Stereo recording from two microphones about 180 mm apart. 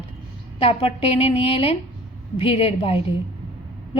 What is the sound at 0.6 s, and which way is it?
A woman's voice, 30° left (ahead or behind).